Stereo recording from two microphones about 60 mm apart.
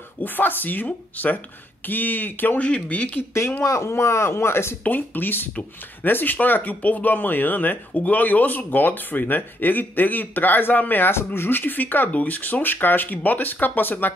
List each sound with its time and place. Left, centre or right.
0.2 s speech: left
3.2 s speech: left
4.8 s speech: left